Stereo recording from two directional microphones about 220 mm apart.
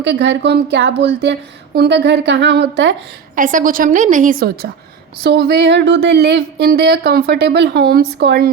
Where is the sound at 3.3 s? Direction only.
35° right (ahead or behind).